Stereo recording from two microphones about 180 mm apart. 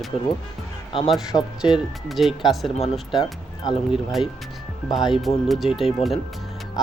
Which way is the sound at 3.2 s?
30° left (ahead or behind).